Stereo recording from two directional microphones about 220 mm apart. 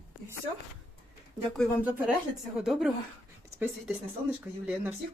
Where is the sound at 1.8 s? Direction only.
10° right (ahead or behind).